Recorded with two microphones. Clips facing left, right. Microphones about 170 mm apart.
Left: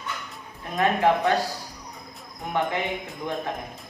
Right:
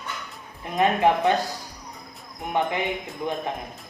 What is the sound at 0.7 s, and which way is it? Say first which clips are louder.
Speech: right 1 dB; 20° right (ahead or behind).